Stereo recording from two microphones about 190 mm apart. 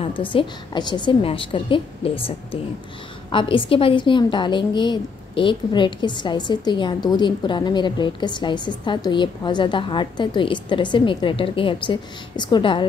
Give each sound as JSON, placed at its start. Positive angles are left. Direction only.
{"t": 0.3, "sound": "a woman's voice", "side_deg": 25}